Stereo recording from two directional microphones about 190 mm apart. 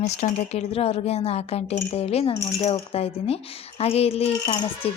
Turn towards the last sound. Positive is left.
turn(degrees=25)  # may be behind; listen again after turning